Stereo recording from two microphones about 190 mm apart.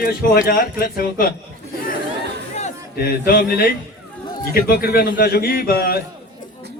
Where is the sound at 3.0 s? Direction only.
50° left (ahead or behind).